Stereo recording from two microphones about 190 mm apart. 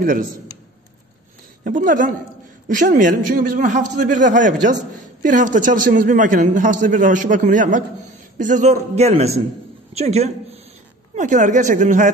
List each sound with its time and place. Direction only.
0.0 s a man's voice: 45° right (ahead or behind)
1.6 s a man's voice: 45° right (ahead or behind)